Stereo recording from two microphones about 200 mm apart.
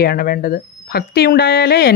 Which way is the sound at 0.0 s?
50° left (ahead or behind).